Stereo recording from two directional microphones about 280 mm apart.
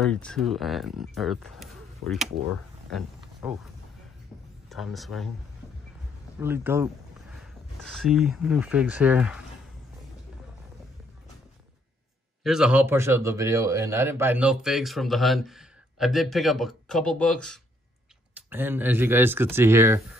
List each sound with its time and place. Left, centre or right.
0.0 s a man's voice: centre
2.9 s a sound: centre
4.6 s a man's voice: centre
6.4 s a man's voice: centre
12.4 s a man's voice: centre